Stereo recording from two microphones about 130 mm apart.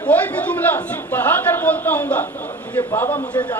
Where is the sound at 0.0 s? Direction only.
10° left (ahead or behind).